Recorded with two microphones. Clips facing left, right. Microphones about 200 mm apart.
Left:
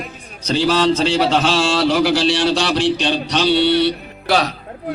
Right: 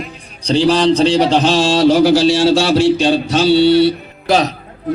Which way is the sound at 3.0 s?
45° right (ahead or behind).